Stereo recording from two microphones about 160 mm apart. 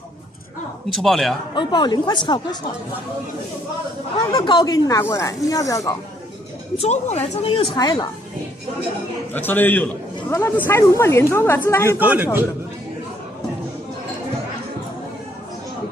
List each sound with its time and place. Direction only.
0.8 s speech: centre (ahead or behind)
1.5 s speech: 30° left (ahead or behind)
4.3 s speech: 25° left (ahead or behind)
6.8 s a woman's voice: 45° left (ahead or behind); by 8.1 s 25° left (ahead or behind)
9.3 s speech: 10° left (ahead or behind)
12.0 s a man's voice: 10° right (ahead or behind)